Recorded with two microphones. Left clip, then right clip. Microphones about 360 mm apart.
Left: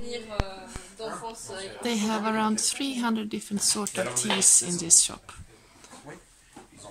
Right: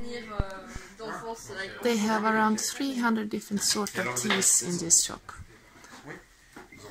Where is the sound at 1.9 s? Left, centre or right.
Centre.